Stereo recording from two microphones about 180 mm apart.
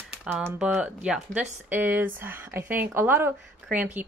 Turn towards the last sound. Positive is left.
turn(degrees=-10)  # may be behind; listen again after turning